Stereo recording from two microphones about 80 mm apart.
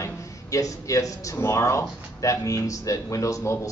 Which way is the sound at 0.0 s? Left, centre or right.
Left.